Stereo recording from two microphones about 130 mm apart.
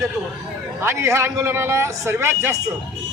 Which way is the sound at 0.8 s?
20° right (ahead or behind).